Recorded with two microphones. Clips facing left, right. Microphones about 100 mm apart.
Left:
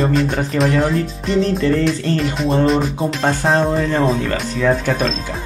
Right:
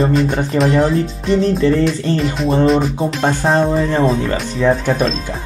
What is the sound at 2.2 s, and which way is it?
Speech, centre (ahead or behind).